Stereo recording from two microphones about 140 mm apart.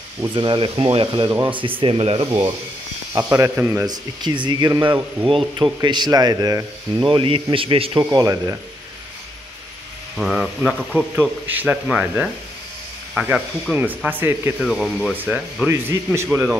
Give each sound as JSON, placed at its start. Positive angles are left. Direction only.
{"t": 0.3, "sound": "speech", "side_deg": -35}
{"t": 3.2, "sound": "a man's voice", "side_deg": -20}
{"t": 3.8, "sound": "speech", "side_deg": -30}
{"t": 8.0, "sound": "a man's voice", "side_deg": -25}
{"t": 10.1, "sound": "speech", "side_deg": -5}
{"t": 14.6, "sound": "speech", "side_deg": 0}
{"t": 15.1, "sound": "speech", "side_deg": -15}